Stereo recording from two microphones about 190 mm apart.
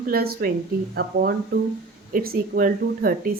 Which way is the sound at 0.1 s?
55° right (ahead or behind).